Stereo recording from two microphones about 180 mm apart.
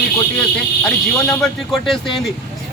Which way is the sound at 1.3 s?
Centre (ahead or behind).